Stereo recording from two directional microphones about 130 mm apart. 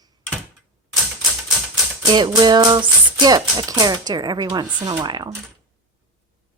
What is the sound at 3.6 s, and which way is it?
Speech, 30° right (ahead or behind).